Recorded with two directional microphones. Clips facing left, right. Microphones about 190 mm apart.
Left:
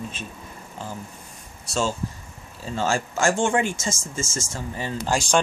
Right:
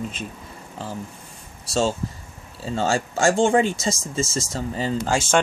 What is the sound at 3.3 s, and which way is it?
Speech, 35° right (ahead or behind).